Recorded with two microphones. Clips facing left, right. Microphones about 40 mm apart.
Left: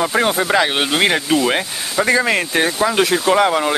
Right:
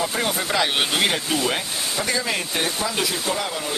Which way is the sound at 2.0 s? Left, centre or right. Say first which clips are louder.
Left 10 dB; left.